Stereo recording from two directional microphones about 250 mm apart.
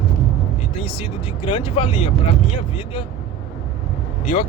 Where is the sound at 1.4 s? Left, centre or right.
Left.